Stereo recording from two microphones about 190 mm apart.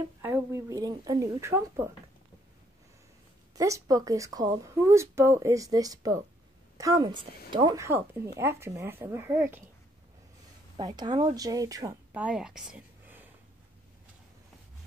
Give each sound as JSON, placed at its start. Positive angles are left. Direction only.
{"t": 0.2, "sound": "speech", "side_deg": -15}
{"t": 3.5, "sound": "speech", "side_deg": -15}
{"t": 10.8, "sound": "speech", "side_deg": -20}